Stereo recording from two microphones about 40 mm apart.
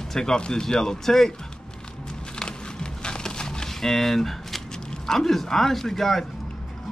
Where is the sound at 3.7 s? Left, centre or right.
Centre.